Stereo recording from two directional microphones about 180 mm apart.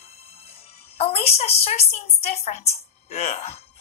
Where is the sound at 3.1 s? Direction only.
35° left (ahead or behind).